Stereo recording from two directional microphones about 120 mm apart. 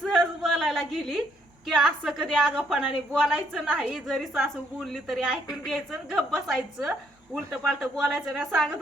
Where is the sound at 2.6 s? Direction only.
10° right (ahead or behind).